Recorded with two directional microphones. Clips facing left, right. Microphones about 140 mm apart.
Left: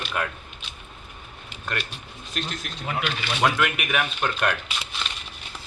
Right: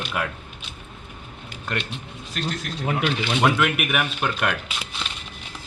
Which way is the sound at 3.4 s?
5° right (ahead or behind).